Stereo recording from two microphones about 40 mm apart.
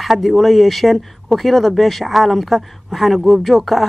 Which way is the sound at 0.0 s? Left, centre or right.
Centre.